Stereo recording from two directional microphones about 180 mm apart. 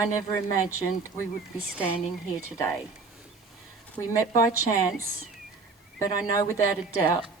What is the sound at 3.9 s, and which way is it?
Speech, 15° left (ahead or behind).